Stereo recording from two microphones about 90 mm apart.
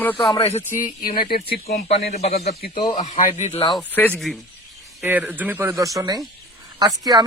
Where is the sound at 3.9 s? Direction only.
20° left (ahead or behind).